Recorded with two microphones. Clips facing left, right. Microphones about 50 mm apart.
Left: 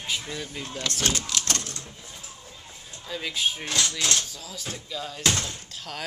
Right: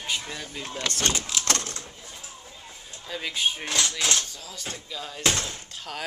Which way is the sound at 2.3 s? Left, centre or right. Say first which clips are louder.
Right 1 dB; centre.